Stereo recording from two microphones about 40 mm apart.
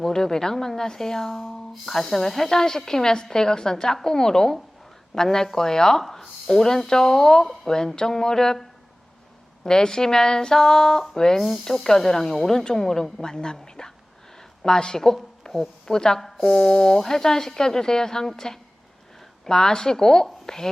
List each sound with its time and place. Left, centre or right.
0.0 s a woman's voice: centre
9.6 s a woman's voice: centre
11.3 s speech: centre
11.6 s a woman's voice: centre
14.3 s a sound: centre
15.9 s a woman's voice: centre